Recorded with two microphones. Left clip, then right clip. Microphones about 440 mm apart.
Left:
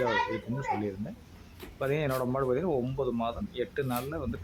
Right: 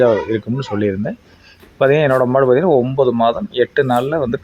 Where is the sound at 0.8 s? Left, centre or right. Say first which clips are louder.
Right 17 dB; left.